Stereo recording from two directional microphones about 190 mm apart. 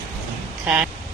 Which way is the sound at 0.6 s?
5° right (ahead or behind).